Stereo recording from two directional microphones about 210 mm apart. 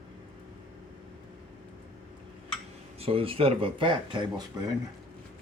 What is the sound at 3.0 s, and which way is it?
Speech, 25° right (ahead or behind).